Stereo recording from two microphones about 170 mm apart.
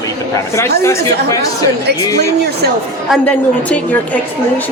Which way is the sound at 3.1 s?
10° left (ahead or behind).